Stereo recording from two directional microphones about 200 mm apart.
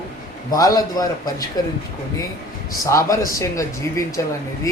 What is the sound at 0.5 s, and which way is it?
Speech, 20° left (ahead or behind).